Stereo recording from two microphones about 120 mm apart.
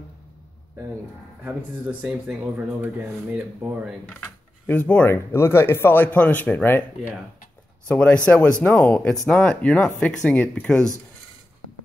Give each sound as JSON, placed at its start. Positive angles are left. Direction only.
{"t": 1.4, "sound": "speech", "side_deg": -10}
{"t": 4.0, "sound": "speech", "side_deg": 10}
{"t": 7.9, "sound": "speech", "side_deg": 10}